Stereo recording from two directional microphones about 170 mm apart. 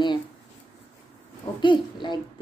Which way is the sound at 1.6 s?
25° left (ahead or behind).